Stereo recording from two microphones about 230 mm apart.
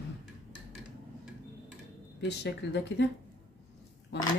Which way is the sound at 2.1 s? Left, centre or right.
Left.